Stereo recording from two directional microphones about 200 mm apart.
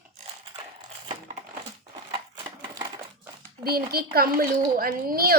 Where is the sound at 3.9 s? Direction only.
50° right (ahead or behind).